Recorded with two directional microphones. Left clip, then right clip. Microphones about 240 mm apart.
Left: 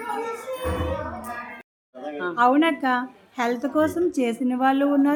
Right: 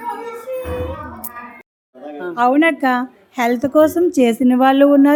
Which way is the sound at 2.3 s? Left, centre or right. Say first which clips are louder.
Right 5 dB; right.